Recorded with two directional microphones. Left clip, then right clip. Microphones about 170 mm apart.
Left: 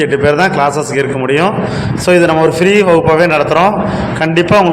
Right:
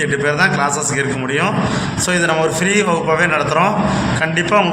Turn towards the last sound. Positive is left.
turn(degrees=35)  # may be behind; listen again after turning